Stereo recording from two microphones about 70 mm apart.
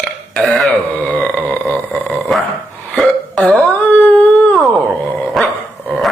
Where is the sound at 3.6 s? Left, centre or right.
Left.